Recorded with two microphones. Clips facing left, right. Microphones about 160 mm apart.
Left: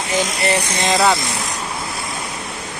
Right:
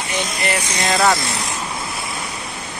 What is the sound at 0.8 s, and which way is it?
Speech, 15° left (ahead or behind).